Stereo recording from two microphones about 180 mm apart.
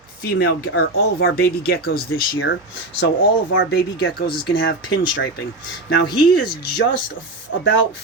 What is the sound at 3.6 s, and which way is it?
Speech, 80° left.